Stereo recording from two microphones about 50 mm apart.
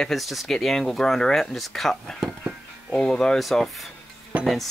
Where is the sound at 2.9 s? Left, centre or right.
Centre.